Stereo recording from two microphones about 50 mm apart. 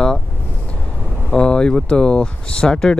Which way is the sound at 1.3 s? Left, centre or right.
Centre.